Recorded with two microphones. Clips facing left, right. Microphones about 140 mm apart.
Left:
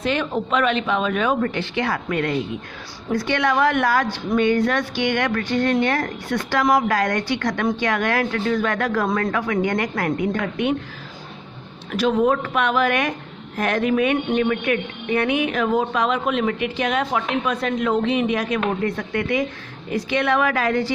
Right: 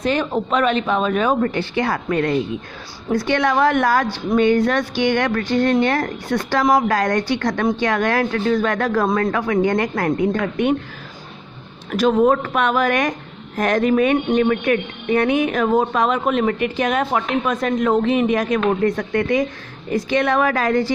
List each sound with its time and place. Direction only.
0.0 s speech: 40° right (ahead or behind)
11.9 s speech: 45° right (ahead or behind)